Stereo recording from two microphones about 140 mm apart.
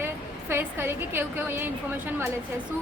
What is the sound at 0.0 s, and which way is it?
A woman's voice, 15° right (ahead or behind).